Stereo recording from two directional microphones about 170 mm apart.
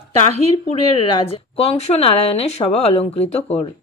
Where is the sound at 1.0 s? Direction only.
30° left (ahead or behind).